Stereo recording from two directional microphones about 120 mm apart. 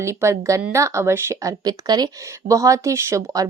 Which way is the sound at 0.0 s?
25° right (ahead or behind).